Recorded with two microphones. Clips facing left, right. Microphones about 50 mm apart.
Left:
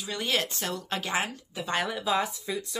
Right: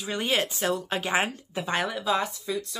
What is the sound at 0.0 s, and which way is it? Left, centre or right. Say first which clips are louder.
Speech: right 3 dB; right.